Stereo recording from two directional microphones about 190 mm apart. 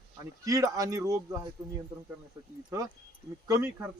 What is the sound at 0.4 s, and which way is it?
Speech, 15° right (ahead or behind).